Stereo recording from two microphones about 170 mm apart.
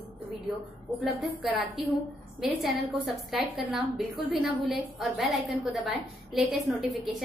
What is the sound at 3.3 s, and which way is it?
A woman's voice, centre (ahead or behind).